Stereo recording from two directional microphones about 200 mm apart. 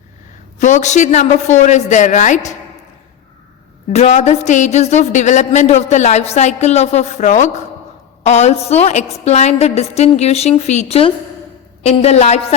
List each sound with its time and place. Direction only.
0.6 s a woman's voice: 35° left (ahead or behind)
3.9 s a woman's voice: 35° left (ahead or behind)